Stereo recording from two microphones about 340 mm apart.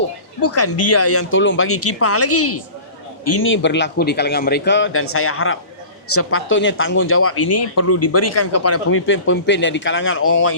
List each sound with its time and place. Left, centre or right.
0.4 s speech: left